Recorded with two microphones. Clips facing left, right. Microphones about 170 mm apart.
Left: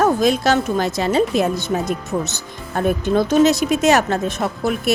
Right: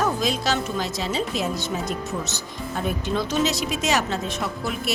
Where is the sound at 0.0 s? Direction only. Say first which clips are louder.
Left 8 dB; 55° left (ahead or behind).